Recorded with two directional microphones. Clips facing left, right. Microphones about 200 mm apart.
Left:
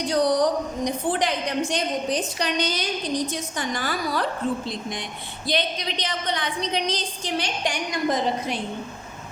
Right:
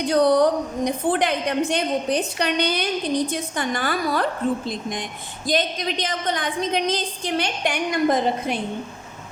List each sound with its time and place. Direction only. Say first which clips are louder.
0.1 s a woman's voice: right 4 dB; 55° right (ahead or behind)